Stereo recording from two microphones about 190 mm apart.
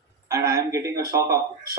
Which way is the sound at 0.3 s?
15° right (ahead or behind).